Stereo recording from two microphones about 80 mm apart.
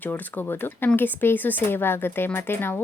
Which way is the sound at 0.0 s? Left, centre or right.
Left.